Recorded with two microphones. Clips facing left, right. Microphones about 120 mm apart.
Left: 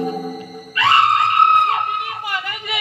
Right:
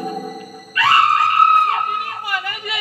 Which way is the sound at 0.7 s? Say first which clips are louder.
Even; 25° left (ahead or behind).